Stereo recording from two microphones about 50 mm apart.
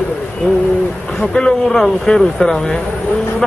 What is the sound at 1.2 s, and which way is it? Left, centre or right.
Speech, centre.